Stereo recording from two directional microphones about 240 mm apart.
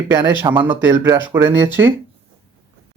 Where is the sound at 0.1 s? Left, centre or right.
Centre.